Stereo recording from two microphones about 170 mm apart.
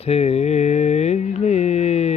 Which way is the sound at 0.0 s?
35° left (ahead or behind).